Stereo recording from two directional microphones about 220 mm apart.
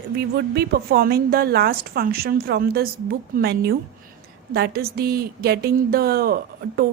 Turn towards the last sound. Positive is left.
turn(degrees=-40)  # may be behind; listen again after turning